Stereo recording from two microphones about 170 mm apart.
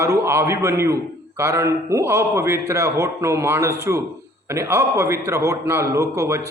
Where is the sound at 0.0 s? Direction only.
15° right (ahead or behind).